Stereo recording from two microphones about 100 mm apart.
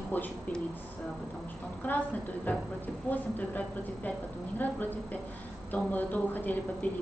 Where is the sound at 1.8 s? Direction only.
15° left (ahead or behind).